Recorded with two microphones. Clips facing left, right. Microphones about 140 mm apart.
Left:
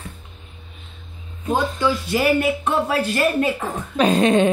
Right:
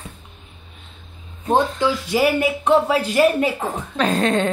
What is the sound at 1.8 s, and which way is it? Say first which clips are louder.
Speech: right 1 dB; 15° right (ahead or behind).